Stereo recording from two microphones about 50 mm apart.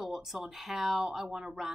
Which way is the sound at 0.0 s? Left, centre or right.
Centre.